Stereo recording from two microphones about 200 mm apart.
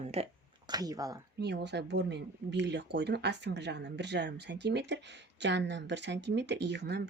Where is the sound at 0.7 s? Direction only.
20° right (ahead or behind).